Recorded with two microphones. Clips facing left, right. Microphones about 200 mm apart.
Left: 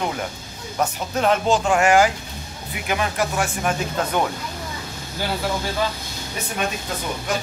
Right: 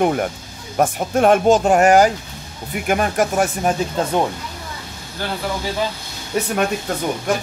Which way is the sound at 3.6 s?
30° right (ahead or behind).